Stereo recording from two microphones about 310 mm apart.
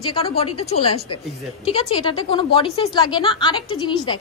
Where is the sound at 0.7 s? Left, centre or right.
Centre.